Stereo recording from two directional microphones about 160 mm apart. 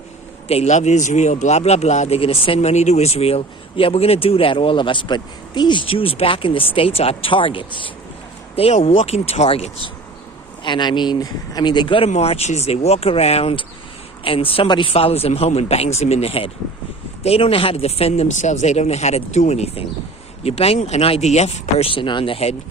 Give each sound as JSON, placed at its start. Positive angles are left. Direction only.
{"t": 0.4, "sound": "speech", "side_deg": 40}
{"t": 10.6, "sound": "speech", "side_deg": 30}